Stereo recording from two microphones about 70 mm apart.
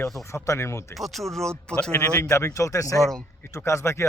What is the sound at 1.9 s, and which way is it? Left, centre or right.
Speech, left.